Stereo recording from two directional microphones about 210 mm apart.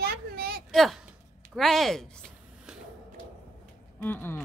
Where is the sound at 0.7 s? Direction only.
Centre (ahead or behind).